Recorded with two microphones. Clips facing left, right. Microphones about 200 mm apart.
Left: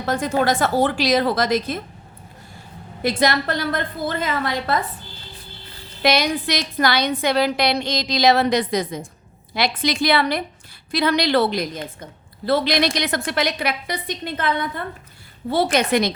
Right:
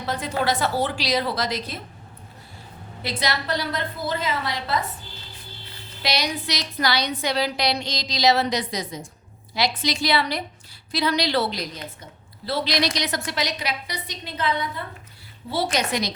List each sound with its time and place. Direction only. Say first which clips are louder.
0.0 s a woman's voice: left 5 dB; 50° left (ahead or behind)
3.0 s a woman's voice: left 8 dB; 50° left (ahead or behind)
6.0 s a woman's voice: left 7 dB; 50° left (ahead or behind)